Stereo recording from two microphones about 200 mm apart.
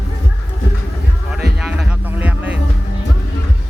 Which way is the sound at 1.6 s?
5° right (ahead or behind).